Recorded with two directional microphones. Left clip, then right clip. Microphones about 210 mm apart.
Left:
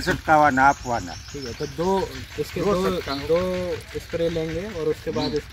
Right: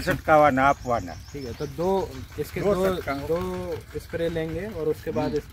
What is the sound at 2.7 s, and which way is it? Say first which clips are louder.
Speech: even; 25° right (ahead or behind).